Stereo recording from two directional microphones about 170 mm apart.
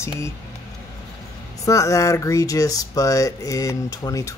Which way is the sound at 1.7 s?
20° left (ahead or behind).